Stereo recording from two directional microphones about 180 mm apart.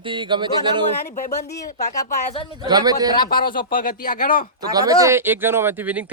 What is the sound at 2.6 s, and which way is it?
Speech, 20° right (ahead or behind).